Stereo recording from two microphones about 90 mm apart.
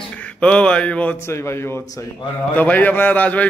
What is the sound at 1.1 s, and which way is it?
Speech, 30° left (ahead or behind).